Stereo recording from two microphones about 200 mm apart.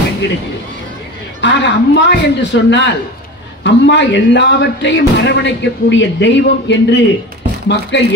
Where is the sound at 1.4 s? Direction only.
60° left (ahead or behind).